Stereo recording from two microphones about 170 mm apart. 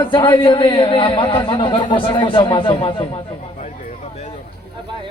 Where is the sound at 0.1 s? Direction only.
25° left (ahead or behind).